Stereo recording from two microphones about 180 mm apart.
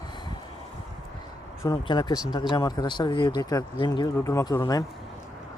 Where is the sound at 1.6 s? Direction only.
25° left (ahead or behind).